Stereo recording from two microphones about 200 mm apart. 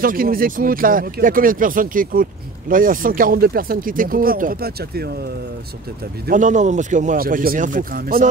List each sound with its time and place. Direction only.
0.0 s speech: 45° right (ahead or behind)
6.2 s speech: 40° right (ahead or behind)